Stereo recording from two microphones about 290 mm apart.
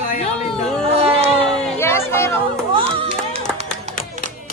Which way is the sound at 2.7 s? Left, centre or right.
Centre.